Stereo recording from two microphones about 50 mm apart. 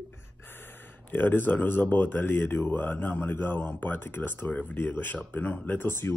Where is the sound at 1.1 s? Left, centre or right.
Left.